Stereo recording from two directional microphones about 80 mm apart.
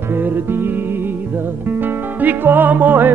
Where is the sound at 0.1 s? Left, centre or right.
Right.